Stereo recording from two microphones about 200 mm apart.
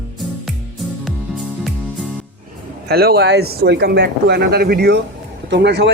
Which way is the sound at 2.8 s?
50° right (ahead or behind).